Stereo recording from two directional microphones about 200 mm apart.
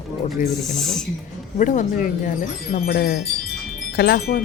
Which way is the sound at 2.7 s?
50° left (ahead or behind).